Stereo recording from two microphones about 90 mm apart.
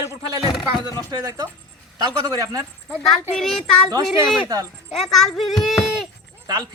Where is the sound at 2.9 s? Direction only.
Centre (ahead or behind).